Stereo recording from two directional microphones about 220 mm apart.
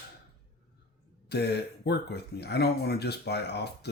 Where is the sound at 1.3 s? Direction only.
50° left (ahead or behind).